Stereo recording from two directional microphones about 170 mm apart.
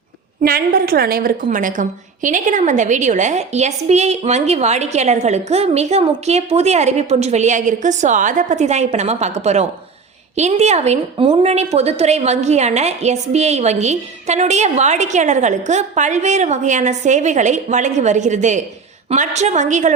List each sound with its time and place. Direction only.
0.4 s a woman's voice: 60° right (ahead or behind); by 19.9 s 45° right (ahead or behind)